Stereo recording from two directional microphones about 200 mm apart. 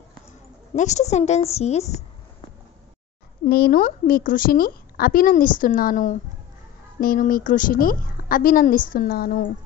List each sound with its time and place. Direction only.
0.7 s a woman's voice: 35° left (ahead or behind)
3.4 s a woman's voice: 50° left (ahead or behind)